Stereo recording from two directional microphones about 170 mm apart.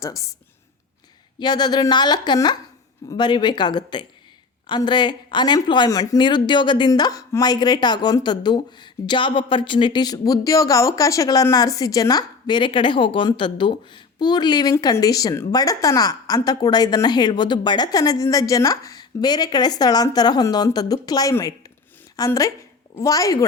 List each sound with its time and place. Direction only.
0.0 s speech: 20° left (ahead or behind)
1.4 s a woman's voice: 25° left (ahead or behind)